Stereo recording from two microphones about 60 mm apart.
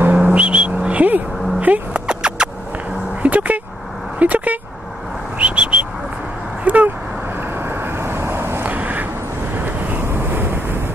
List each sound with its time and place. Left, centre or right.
0.0 s vehicle: right
2.0 s music: centre
3.2 s a sound: right
4.2 s vehicle: right
5.4 s bird: right
6.6 s a sound: right
7.5 s vehicle: right
8.6 s vehicle: right
10.0 s wind noise: right